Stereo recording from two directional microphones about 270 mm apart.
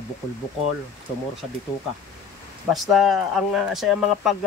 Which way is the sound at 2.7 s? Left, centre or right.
Centre.